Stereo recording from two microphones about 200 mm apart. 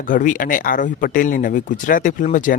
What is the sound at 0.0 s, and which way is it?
Speech, 40° left (ahead or behind).